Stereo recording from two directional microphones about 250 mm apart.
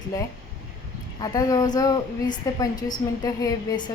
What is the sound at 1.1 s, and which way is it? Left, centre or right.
A woman's voice, centre.